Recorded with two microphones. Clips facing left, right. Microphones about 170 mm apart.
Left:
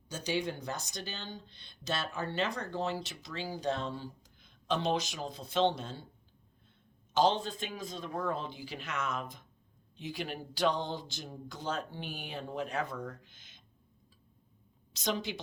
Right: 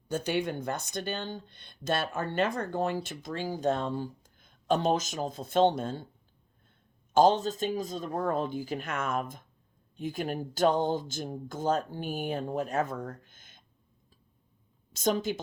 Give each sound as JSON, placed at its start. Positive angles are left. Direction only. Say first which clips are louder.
{"t": 0.1, "sound": "speech", "louder": "right 5 dB", "side_deg": -55}
{"t": 7.1, "sound": "speech", "louder": "right 6 dB", "side_deg": -45}
{"t": 14.9, "sound": "speech", "louder": "right 7 dB", "side_deg": -45}